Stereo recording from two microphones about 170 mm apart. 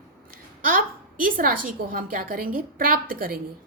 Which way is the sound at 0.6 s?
55° right (ahead or behind).